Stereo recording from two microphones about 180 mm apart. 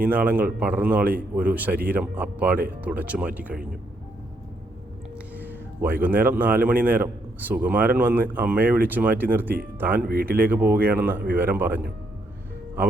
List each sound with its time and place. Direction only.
0.0 s a man's voice: 10° right (ahead or behind)
5.4 s a man's voice: 10° right (ahead or behind)
10.1 s speech: 55° right (ahead or behind)
10.3 s a man's voice: 10° right (ahead or behind)